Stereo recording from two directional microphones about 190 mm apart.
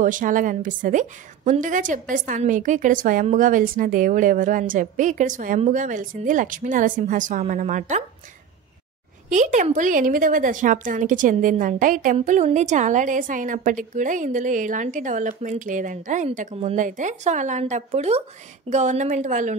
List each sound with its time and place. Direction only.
0.0 s a woman's voice: 45° right (ahead or behind)
9.3 s a woman's voice: 40° right (ahead or behind)